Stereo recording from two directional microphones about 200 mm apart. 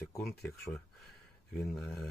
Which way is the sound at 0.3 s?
Centre (ahead or behind).